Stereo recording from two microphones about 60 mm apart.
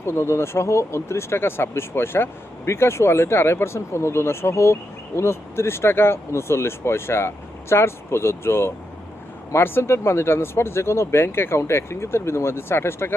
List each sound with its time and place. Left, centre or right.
0.0 s speech: left